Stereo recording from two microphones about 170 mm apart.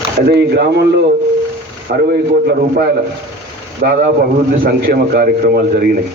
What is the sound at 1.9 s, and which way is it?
Speech, 55° right (ahead or behind).